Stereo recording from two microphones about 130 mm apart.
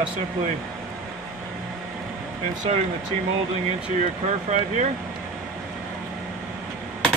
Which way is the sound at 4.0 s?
60° right (ahead or behind).